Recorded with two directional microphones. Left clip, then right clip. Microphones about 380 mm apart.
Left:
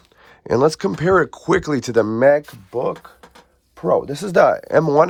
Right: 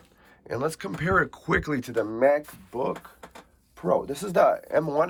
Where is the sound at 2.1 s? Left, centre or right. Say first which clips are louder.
Left 5 dB; left.